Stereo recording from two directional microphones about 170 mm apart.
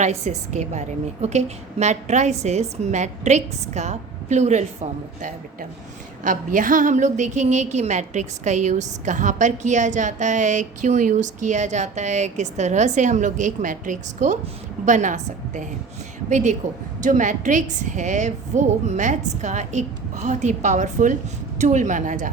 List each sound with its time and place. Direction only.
0.0 s a woman's voice: 40° right (ahead or behind)